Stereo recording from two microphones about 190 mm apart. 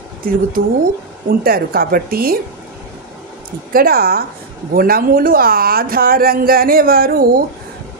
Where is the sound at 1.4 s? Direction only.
50° right (ahead or behind).